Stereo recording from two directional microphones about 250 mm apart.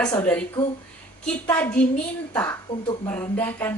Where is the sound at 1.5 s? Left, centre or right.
Centre.